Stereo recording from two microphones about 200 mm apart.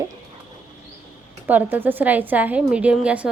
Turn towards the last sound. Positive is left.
turn(degrees=-5)  # may be behind; listen again after turning